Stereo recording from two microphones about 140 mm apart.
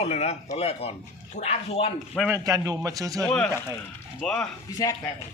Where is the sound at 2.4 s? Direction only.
25° right (ahead or behind).